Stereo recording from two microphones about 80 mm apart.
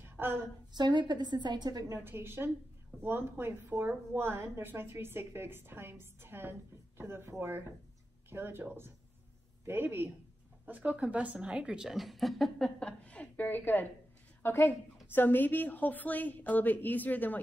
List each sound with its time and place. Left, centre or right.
0.0 s a sound: right
0.7 s a woman's voice: right
2.0 s a woman's voice: right
9.7 s a woman's voice: right
10.6 s a woman's voice: centre; by 17.4 s left